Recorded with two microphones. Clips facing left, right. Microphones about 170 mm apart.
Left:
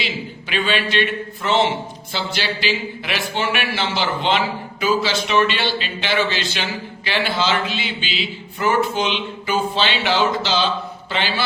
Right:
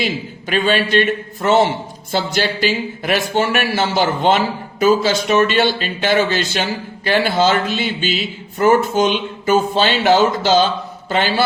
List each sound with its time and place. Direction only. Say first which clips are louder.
0.0 s speech: right 6 dB; 45° right (ahead or behind)